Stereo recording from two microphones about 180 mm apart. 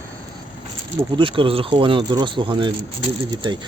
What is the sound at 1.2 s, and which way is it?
Speech, 30° right (ahead or behind).